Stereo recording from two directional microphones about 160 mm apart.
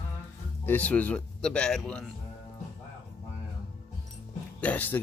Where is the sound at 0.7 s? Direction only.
10° left (ahead or behind).